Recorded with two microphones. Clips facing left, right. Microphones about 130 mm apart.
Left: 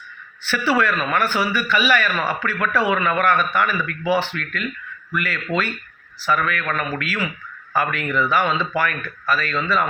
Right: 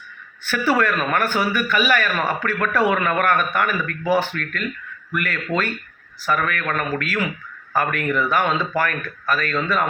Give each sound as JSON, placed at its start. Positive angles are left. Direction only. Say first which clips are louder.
{"t": 0.4, "sound": "a man's voice", "louder": "even", "side_deg": -45}